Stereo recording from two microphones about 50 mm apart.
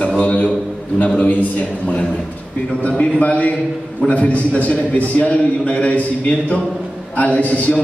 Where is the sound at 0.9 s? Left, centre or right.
Left.